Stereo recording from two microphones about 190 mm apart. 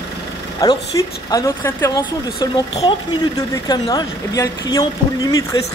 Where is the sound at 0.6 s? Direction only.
20° left (ahead or behind).